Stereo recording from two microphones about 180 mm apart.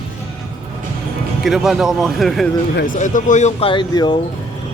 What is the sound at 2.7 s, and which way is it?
Speech, 50° left (ahead or behind).